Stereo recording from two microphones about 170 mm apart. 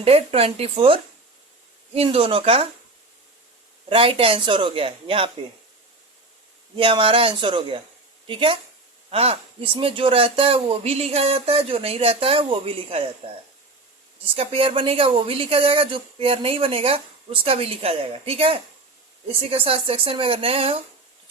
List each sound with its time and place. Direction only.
0.0 s a woman's voice: 35° right (ahead or behind)
3.8 s a woman's voice: 30° right (ahead or behind)
6.7 s a woman's voice: 30° right (ahead or behind)
14.3 s a woman's voice: 30° right (ahead or behind)